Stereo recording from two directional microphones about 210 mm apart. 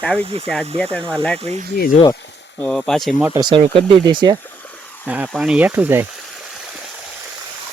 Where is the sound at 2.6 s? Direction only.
Centre (ahead or behind).